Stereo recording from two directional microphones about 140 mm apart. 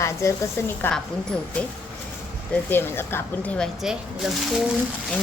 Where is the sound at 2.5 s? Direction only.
15° left (ahead or behind).